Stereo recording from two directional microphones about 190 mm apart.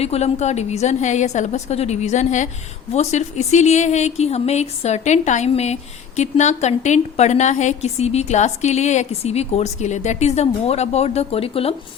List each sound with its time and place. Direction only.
0.0 s a woman's voice: 35° left (ahead or behind)